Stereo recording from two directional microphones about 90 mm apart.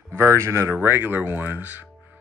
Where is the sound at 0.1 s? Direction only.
30° right (ahead or behind).